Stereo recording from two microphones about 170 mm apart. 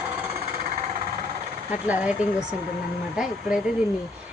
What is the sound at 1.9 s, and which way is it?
Speech, 10° right (ahead or behind).